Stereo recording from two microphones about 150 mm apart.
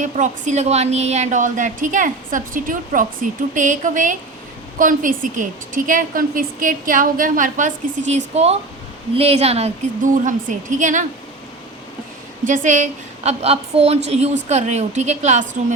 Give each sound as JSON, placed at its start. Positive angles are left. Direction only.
{"t": 0.0, "sound": "a woman's voice", "side_deg": -55}
{"t": 12.5, "sound": "a woman's voice", "side_deg": -55}